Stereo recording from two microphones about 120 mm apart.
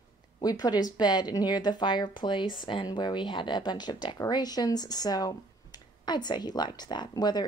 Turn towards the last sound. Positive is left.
turn(degrees=35)  # may be behind; listen again after turning